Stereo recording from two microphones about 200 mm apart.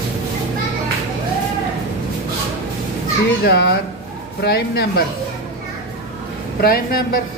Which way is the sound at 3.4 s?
55° left (ahead or behind).